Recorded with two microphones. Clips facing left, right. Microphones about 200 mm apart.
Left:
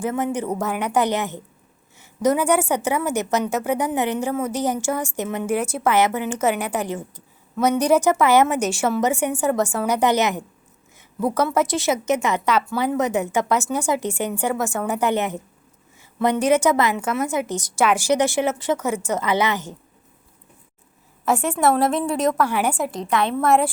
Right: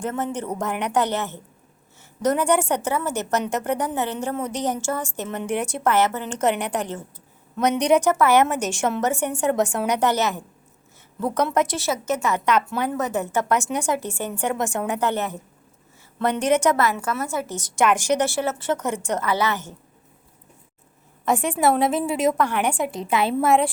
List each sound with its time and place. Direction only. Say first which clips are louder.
0.0 s a woman's voice: left 3 dB; 10° left (ahead or behind)
10.1 s a woman's voice: left 3 dB; 15° left (ahead or behind)
13.5 s a woman's voice: left 1 dB; 5° left (ahead or behind)
14.0 s a woman's voice: left 3 dB; 15° left (ahead or behind)
19.2 s a woman's voice: left 3 dB; 20° left (ahead or behind)
21.2 s a woman's voice: left 1 dB; centre (ahead or behind)